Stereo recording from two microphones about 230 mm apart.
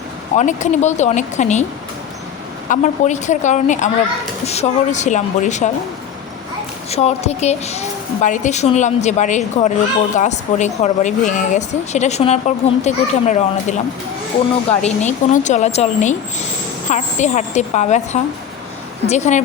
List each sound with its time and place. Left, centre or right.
0.3 s a woman's voice: left
2.6 s a woman's voice: left
6.9 s a woman's voice: left